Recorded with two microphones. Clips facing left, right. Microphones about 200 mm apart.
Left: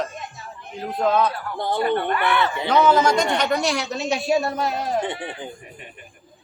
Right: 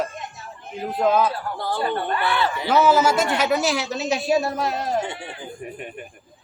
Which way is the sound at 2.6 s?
5° right (ahead or behind).